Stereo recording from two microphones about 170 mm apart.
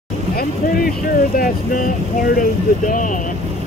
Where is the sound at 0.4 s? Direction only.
60° left (ahead or behind).